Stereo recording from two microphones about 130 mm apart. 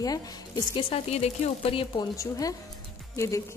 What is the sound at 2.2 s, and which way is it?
A woman's voice, 25° left (ahead or behind).